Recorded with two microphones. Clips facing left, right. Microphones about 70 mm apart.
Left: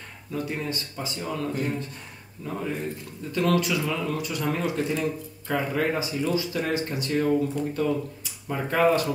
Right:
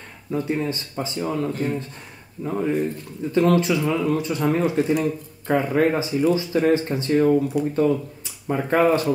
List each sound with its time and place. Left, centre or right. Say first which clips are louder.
0.3 s speech: right 6 dB; right
7.6 s speech: right 6 dB; centre
8.2 s speech: right 5 dB; right